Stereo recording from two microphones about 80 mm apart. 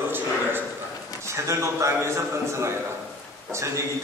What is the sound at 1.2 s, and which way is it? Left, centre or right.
A man's voice, right.